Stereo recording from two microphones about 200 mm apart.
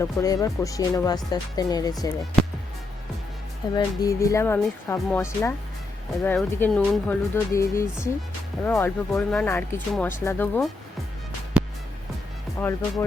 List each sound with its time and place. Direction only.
0.0 s speech: 15° left (ahead or behind)
3.8 s speech: 15° left (ahead or behind)
11.6 s music: 5° right (ahead or behind)
12.5 s speech: 10° left (ahead or behind)